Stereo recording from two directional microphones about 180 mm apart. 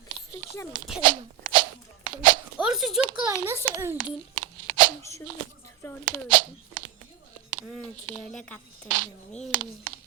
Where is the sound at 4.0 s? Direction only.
25° right (ahead or behind).